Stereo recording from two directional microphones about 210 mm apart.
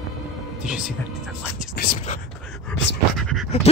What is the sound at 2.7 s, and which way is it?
Speech, 55° left (ahead or behind).